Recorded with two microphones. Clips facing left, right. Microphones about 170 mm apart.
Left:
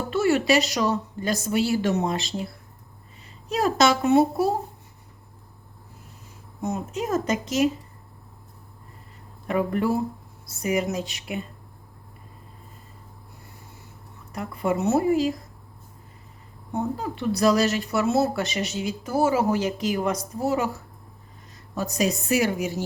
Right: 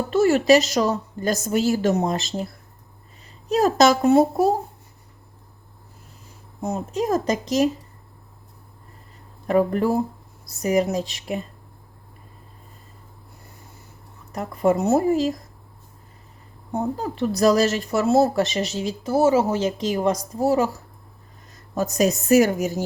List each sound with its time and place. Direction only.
0.1 s speech: 40° right (ahead or behind)
3.5 s speech: 40° right (ahead or behind)
6.6 s speech: 35° right (ahead or behind)
9.5 s speech: 35° right (ahead or behind)
14.3 s speech: 40° right (ahead or behind)
16.7 s a woman's voice: 40° right (ahead or behind)